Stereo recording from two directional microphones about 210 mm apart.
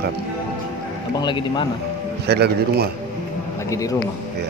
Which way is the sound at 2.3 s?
50° right (ahead or behind).